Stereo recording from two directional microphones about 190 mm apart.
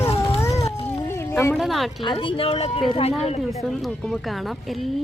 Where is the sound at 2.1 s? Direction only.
30° left (ahead or behind).